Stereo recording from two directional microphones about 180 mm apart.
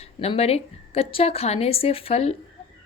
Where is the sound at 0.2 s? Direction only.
35° left (ahead or behind).